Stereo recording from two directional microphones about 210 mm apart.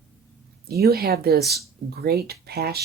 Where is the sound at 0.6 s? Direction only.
50° right (ahead or behind).